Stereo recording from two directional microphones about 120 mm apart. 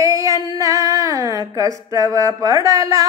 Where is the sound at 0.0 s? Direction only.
30° right (ahead or behind).